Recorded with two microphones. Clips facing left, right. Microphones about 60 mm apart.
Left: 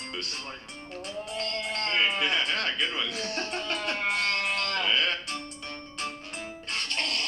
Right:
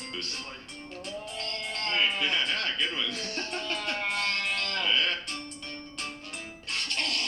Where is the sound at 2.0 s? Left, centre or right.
Left.